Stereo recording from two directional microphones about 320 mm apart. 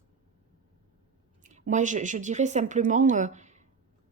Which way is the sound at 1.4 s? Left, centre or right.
Right.